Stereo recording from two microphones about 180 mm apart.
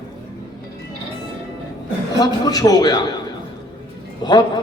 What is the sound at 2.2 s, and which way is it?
Speech, 20° left (ahead or behind).